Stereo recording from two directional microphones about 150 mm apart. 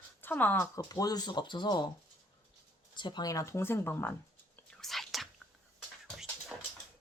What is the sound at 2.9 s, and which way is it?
Speech, 30° left (ahead or behind).